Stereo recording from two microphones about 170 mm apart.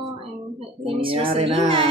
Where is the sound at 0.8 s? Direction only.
30° right (ahead or behind).